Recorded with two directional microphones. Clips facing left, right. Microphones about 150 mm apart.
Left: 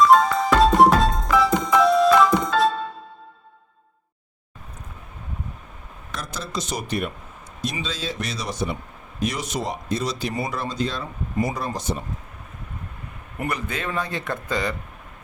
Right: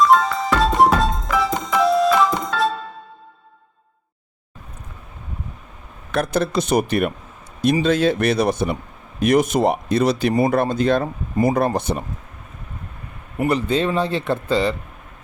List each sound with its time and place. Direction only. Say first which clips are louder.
0.6 s music: left 1 dB; centre (ahead or behind)
6.1 s speech: right 13 dB; 60° right (ahead or behind)
13.4 s speech: right 9 dB; 30° right (ahead or behind)